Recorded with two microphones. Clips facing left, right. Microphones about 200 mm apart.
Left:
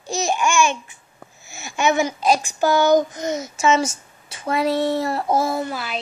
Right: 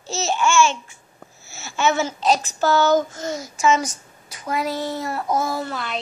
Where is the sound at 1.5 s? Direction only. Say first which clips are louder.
Left 1 dB; 15° left (ahead or behind).